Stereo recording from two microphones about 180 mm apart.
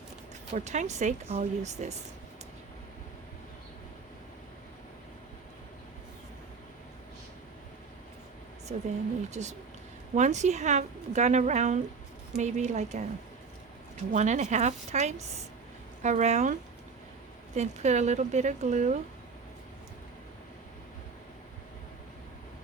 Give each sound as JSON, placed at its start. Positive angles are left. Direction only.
{"t": 0.5, "sound": "a woman's voice", "side_deg": -40}
{"t": 8.7, "sound": "a woman's voice", "side_deg": -45}
{"t": 14.1, "sound": "a woman's voice", "side_deg": -40}